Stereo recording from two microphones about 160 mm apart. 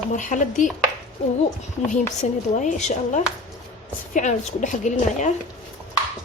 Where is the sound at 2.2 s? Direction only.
45° left (ahead or behind).